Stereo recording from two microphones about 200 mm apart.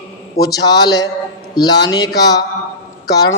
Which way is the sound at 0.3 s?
20° left (ahead or behind).